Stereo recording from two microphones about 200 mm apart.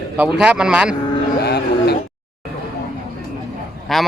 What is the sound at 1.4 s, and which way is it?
Cattle, 55° left (ahead or behind).